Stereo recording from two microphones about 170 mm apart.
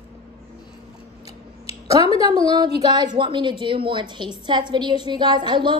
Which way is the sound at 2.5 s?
25° right (ahead or behind).